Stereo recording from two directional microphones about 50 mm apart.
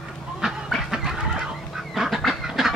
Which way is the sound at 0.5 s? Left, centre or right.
Centre.